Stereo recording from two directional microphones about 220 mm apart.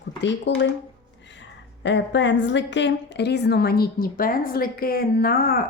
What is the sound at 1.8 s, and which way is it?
A woman's voice, 55° left (ahead or behind).